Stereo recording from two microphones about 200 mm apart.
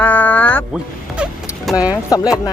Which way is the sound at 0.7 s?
5° right (ahead or behind).